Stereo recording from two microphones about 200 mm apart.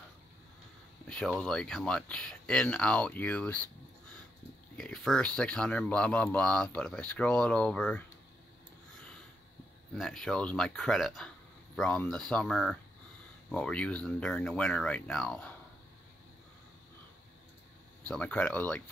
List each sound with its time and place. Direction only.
1.0 s speech: 5° left (ahead or behind)
4.7 s speech: 5° left (ahead or behind)
9.9 s speech: centre (ahead or behind)
18.0 s speech: 5° left (ahead or behind)